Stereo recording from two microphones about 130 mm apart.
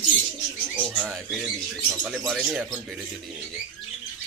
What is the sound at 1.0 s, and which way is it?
Speech, centre (ahead or behind).